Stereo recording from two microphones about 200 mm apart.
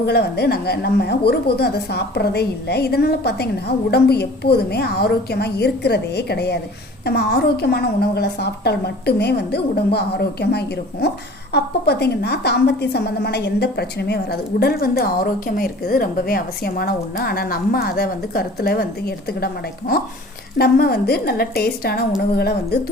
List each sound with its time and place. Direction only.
0.0 s a woman's voice: 55° left (ahead or behind)
20.6 s a woman's voice: 50° left (ahead or behind)